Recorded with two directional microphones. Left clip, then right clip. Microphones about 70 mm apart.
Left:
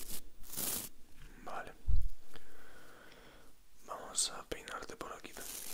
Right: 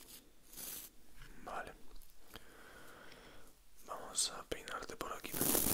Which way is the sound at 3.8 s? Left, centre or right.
Centre.